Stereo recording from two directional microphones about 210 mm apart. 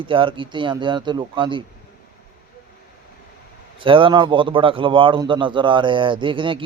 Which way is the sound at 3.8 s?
25° right (ahead or behind).